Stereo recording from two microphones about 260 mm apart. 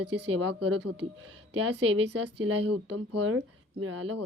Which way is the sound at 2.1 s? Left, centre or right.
Right.